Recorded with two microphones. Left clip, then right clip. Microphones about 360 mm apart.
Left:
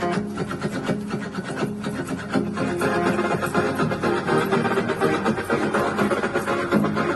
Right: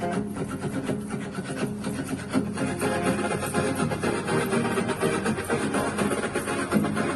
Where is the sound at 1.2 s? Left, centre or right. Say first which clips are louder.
Left 4 dB; left.